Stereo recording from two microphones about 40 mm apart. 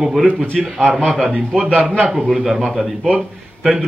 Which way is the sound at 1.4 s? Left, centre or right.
Centre.